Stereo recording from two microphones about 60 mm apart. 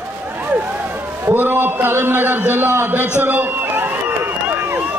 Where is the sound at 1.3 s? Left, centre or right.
Right.